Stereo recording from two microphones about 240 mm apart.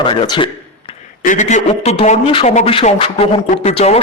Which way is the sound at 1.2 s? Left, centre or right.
Left.